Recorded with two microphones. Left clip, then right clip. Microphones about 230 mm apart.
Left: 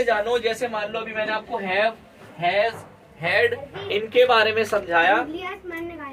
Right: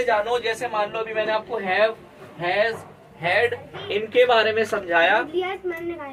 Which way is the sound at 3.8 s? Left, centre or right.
Centre.